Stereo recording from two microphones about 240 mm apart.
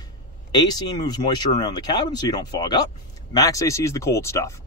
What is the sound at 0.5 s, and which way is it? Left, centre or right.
Speech, centre.